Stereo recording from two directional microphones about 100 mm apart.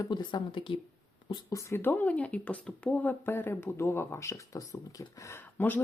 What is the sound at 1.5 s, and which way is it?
Speech, 35° left (ahead or behind).